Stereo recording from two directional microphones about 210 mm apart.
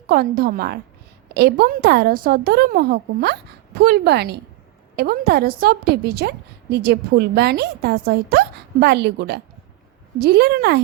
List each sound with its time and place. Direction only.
0.1 s a woman's voice: 45° right (ahead or behind)